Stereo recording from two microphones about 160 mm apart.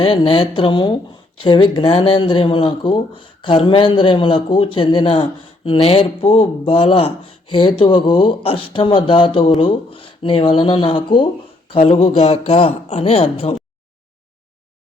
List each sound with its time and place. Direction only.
0.0 s speech: 35° left (ahead or behind)